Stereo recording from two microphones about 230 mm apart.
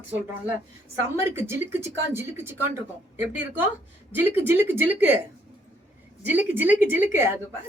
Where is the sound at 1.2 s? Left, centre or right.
Centre.